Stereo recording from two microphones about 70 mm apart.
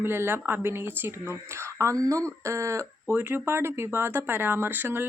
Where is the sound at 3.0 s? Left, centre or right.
Right.